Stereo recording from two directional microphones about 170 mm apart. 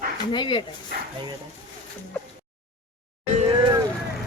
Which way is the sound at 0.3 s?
25° left (ahead or behind).